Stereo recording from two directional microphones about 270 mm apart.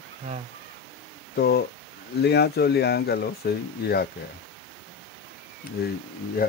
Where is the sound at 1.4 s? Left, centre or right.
Left.